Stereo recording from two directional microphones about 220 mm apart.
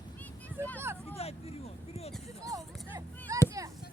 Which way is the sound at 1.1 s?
25° left (ahead or behind).